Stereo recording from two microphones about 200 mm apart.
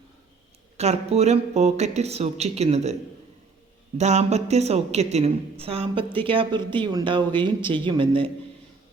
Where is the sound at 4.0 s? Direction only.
35° right (ahead or behind).